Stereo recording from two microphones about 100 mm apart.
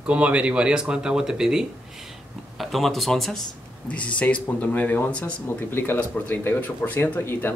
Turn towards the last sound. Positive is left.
turn(degrees=20)  # may be behind; listen again after turning